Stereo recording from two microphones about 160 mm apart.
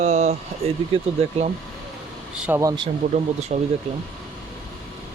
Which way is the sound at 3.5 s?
50° right (ahead or behind).